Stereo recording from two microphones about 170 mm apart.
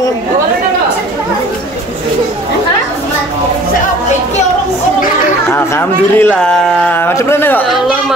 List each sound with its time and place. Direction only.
5.5 s a man's voice: 10° left (ahead or behind)